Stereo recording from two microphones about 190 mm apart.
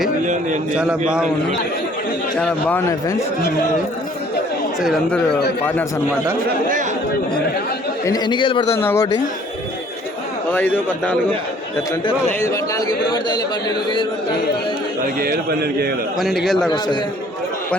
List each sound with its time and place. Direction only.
0.8 s a man's voice: 5° right (ahead or behind)
2.4 s a man's voice: 5° left (ahead or behind)
4.8 s a man's voice: centre (ahead or behind)
8.0 s a man's voice: 20° left (ahead or behind)
8.8 s a man's voice: 15° left (ahead or behind)
10.5 s a man's voice: 10° left (ahead or behind)
12.4 s a man's voice: 15° left (ahead or behind)
15.0 s a man's voice: 50° right (ahead or behind)
16.1 s a man's voice: centre (ahead or behind)